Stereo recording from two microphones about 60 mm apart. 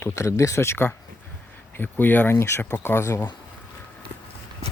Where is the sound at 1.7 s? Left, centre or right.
Left.